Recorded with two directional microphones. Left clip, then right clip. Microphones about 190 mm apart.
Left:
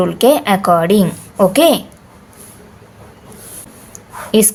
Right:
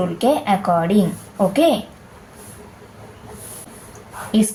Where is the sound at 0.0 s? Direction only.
55° left (ahead or behind).